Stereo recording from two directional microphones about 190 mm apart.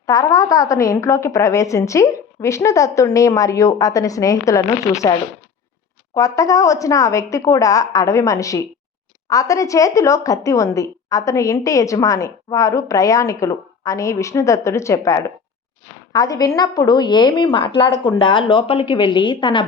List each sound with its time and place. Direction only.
0.0 s a woman's voice: 20° left (ahead or behind)
6.1 s a woman's voice: 15° left (ahead or behind)